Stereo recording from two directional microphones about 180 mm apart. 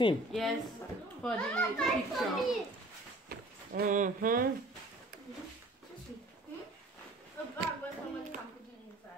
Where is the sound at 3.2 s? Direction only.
55° right (ahead or behind).